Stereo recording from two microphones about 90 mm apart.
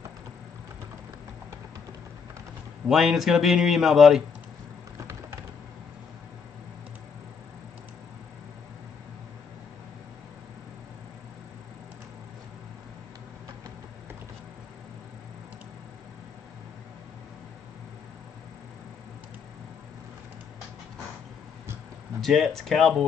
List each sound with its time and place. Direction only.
2.9 s speech: 5° right (ahead or behind)
4.9 s a sound: 35° right (ahead or behind)
22.2 s speech: centre (ahead or behind)